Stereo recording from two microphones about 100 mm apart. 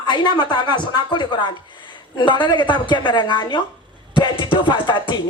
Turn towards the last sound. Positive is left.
turn(degrees=50)  # may be behind; listen again after turning